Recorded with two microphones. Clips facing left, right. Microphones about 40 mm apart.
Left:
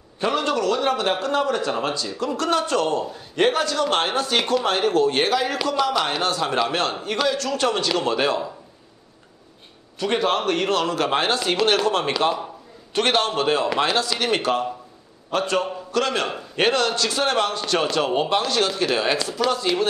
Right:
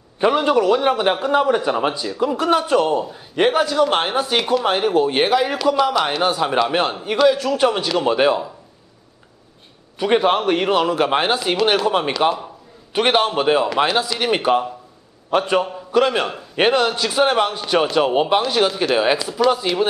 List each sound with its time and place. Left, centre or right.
0.2 s a man's voice: centre
9.9 s a man's voice: centre